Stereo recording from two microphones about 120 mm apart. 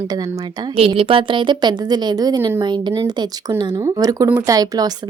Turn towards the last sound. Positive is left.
turn(degrees=-30)  # may be behind; listen again after turning